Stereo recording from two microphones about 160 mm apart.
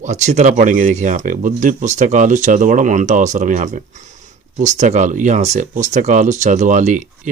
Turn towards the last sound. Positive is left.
turn(degrees=-50)  # may be behind; listen again after turning